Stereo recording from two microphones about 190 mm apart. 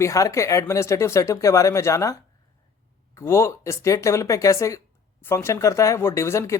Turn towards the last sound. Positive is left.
turn(degrees=15)  # may be behind; listen again after turning